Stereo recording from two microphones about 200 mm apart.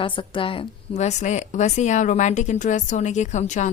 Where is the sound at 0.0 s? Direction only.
25° left (ahead or behind).